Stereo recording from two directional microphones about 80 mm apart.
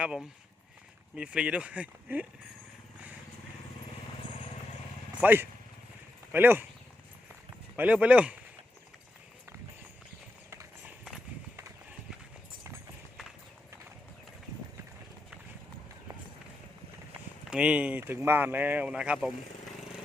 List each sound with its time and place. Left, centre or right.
1.1 s speech: centre
5.2 s speech: right
7.8 s speech: centre
17.5 s speech: centre
18.0 s speech: right
18.9 s speech: centre